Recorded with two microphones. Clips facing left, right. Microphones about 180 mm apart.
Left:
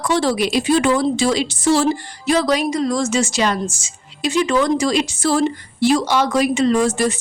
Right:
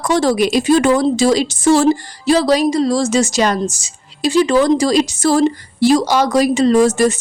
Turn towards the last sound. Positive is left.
turn(degrees=-40)  # may be behind; listen again after turning